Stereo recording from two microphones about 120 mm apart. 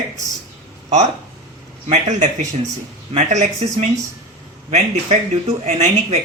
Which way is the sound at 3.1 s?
75° right (ahead or behind).